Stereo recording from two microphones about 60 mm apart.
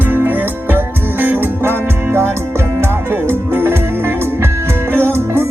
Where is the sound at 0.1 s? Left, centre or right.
Right.